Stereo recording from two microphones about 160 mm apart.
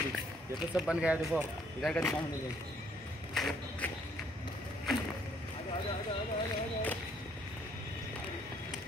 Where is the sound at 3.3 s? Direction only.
Centre (ahead or behind).